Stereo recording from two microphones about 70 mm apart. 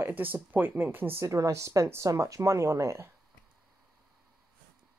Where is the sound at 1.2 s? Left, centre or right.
Right.